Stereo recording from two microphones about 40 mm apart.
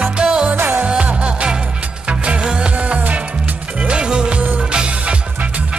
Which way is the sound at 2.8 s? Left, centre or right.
Right.